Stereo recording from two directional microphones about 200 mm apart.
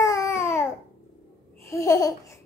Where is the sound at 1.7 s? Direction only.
15° left (ahead or behind).